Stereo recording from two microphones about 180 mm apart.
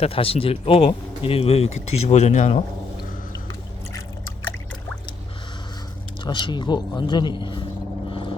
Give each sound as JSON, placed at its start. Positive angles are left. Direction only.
{"t": 0.0, "sound": "speech", "side_deg": 30}
{"t": 6.2, "sound": "a man's voice", "side_deg": 25}